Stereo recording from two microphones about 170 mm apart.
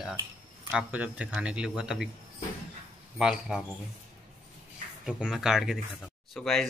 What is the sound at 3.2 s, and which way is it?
Speech, 5° right (ahead or behind).